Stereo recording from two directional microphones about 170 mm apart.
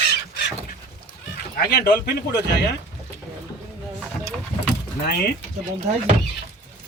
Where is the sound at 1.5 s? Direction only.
70° left (ahead or behind).